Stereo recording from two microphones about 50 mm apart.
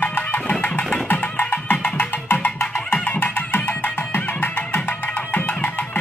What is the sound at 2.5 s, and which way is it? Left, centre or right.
Music, left.